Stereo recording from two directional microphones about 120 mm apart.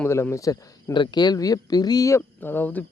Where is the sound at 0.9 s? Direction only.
40° left (ahead or behind); by 2.8 s 15° left (ahead or behind).